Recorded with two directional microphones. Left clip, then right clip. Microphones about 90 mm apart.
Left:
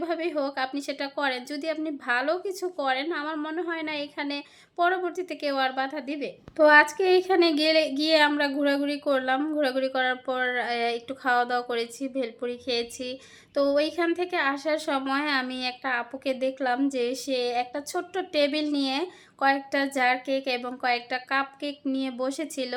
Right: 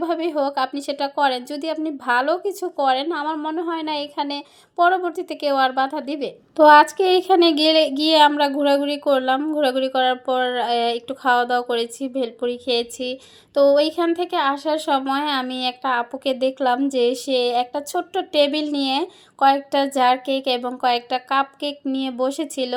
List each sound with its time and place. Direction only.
0.0 s speech: 35° right (ahead or behind)
3.3 s speech: 25° right (ahead or behind)
3.7 s a woman's voice: 35° right (ahead or behind)